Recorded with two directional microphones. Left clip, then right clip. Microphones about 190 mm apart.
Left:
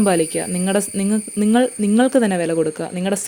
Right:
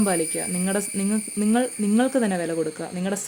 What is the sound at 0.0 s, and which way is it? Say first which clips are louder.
Speech: left 7 dB; 30° left (ahead or behind).